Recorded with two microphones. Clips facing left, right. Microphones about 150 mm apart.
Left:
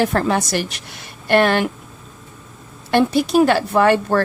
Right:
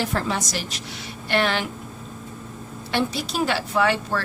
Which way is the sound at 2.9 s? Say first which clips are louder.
Left 10 dB; 55° left (ahead or behind).